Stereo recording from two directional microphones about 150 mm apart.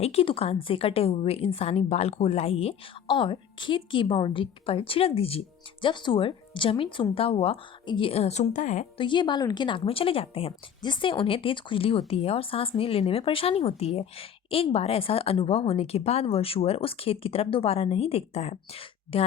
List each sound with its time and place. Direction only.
0.0 s a woman's voice: 40° left (ahead or behind)
9.0 s a woman's voice: 30° left (ahead or behind)